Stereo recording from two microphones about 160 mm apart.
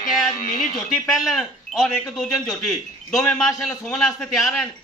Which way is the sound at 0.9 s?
Centre (ahead or behind).